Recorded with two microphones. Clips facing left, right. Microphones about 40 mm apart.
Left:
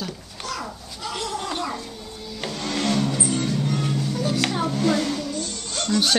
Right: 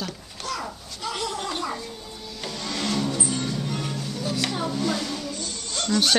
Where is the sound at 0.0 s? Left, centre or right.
Centre.